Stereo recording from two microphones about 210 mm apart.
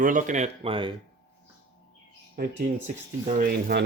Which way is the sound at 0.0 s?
40° right (ahead or behind).